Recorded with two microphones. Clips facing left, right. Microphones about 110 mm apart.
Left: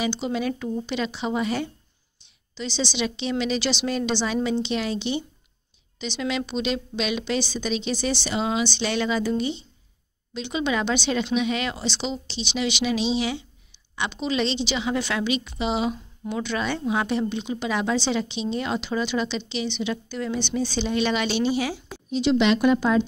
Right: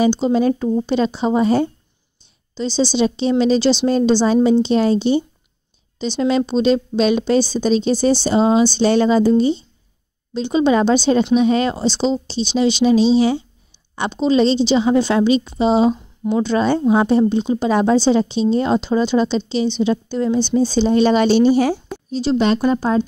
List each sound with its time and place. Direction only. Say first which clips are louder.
0.0 s a woman's voice: right 10 dB; 35° right (ahead or behind)